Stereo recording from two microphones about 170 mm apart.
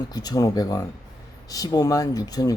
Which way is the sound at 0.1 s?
20° left (ahead or behind).